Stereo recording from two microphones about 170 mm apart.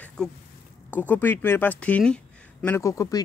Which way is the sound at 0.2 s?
5° left (ahead or behind).